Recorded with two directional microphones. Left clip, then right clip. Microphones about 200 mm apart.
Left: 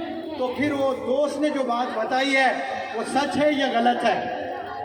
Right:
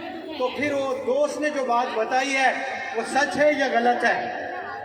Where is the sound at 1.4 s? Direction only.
15° right (ahead or behind).